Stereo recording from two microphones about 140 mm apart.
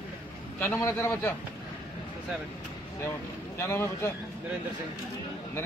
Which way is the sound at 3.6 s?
20° left (ahead or behind).